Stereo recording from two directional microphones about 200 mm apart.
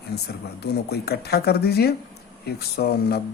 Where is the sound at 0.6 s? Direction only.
55° left (ahead or behind).